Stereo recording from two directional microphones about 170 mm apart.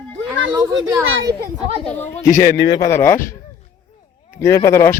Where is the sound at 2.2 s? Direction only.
55° left (ahead or behind).